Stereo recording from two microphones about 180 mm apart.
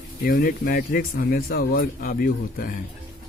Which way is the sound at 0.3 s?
55° left (ahead or behind).